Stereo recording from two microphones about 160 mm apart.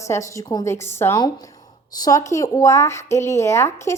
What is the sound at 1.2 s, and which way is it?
A woman's voice, 25° left (ahead or behind).